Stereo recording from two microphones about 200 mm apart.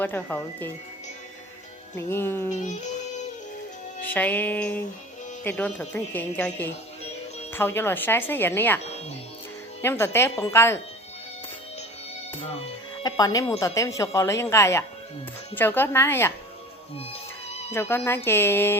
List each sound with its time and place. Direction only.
0.0 s speech: 10° left (ahead or behind)
2.0 s speech: 10° left (ahead or behind)
4.0 s speech: 10° left (ahead or behind)
9.8 s speech: 10° left (ahead or behind)
12.3 s speech: 25° left (ahead or behind)
17.7 s speech: 10° left (ahead or behind)